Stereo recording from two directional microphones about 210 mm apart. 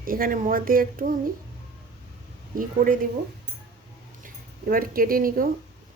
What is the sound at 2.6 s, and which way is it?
Speech, 40° right (ahead or behind).